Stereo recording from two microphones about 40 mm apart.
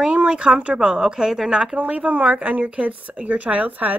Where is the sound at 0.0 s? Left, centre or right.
Right.